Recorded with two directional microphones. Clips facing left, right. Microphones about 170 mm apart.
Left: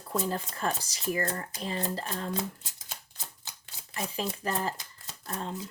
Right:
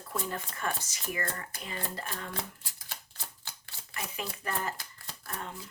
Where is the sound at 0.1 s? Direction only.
30° left (ahead or behind).